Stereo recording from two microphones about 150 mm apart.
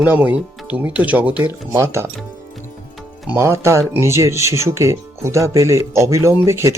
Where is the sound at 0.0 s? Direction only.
10° right (ahead or behind).